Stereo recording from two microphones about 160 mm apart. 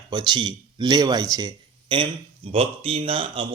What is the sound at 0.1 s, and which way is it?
A man's voice, 30° right (ahead or behind).